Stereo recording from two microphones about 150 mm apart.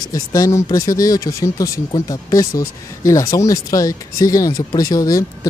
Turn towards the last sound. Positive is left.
turn(degrees=25)  # may be behind; listen again after turning